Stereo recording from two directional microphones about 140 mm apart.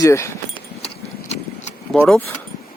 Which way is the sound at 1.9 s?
5° left (ahead or behind).